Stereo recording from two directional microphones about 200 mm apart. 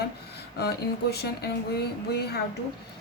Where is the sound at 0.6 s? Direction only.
55° left (ahead or behind).